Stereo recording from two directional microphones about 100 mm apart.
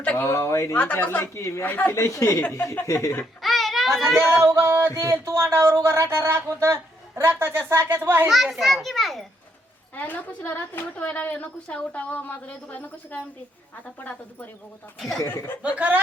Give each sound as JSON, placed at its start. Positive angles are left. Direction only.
{"t": 0.0, "sound": "speech", "side_deg": 15}
{"t": 0.3, "sound": "speech", "side_deg": 30}
{"t": 0.8, "sound": "a woman's voice", "side_deg": 15}
{"t": 1.2, "sound": "speech", "side_deg": 30}
{"t": 1.6, "sound": "a woman's voice", "side_deg": 20}
{"t": 2.0, "sound": "speech", "side_deg": 30}
{"t": 3.4, "sound": "a sound", "side_deg": 0}
{"t": 4.2, "sound": "speech", "side_deg": -25}
{"t": 8.3, "sound": "a child's voice", "side_deg": 0}
{"t": 9.9, "sound": "a woman's voice", "side_deg": 15}
{"t": 14.9, "sound": "a child's voice", "side_deg": 0}
{"t": 15.3, "sound": "speech", "side_deg": 20}
{"t": 15.6, "sound": "speech", "side_deg": -15}